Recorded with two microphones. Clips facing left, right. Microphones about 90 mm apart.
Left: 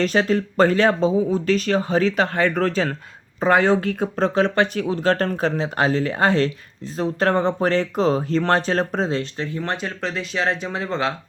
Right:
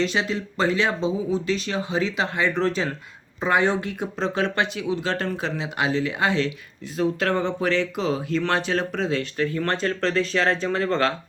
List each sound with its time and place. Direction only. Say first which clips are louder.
0.0 s speech: left 5 dB; 45° left (ahead or behind); by 11.1 s 15° left (ahead or behind)